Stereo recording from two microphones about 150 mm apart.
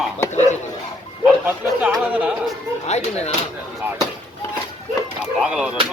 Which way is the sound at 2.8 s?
45° left (ahead or behind).